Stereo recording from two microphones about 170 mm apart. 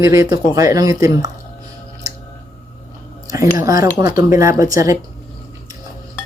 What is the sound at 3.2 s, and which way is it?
Speech, 20° right (ahead or behind).